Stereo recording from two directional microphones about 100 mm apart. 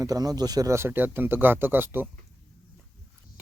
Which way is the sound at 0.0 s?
40° right (ahead or behind).